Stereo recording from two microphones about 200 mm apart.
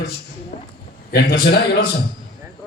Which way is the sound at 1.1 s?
55° left (ahead or behind).